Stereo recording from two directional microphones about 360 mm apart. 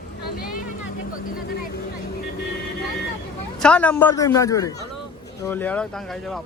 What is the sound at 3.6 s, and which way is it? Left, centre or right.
A man's voice, centre.